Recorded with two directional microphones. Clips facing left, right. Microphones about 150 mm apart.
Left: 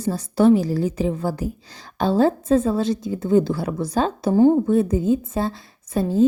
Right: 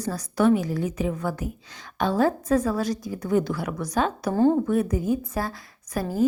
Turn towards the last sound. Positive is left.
turn(degrees=25)  # may be behind; listen again after turning